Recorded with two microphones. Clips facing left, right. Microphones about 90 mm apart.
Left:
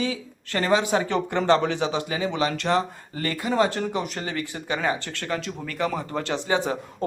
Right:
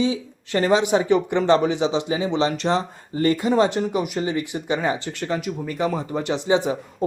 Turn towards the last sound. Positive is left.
turn(degrees=-20)  # may be behind; listen again after turning